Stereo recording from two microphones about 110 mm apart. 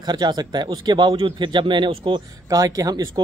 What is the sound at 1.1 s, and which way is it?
A man's voice, 55° right (ahead or behind).